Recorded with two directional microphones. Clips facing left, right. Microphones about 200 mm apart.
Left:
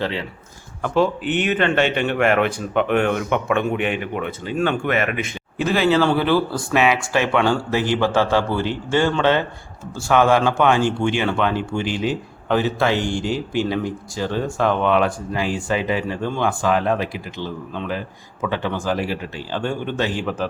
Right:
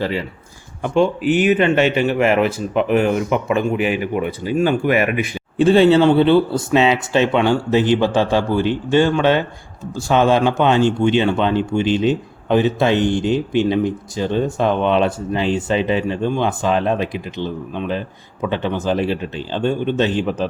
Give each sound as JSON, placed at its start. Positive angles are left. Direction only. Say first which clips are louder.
{"t": 0.0, "sound": "speech", "louder": "right 3 dB", "side_deg": -5}
{"t": 5.5, "sound": "speech", "louder": "right 6 dB", "side_deg": -30}